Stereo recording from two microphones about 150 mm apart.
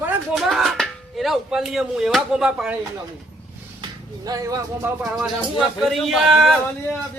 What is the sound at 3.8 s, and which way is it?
Speech, 25° right (ahead or behind).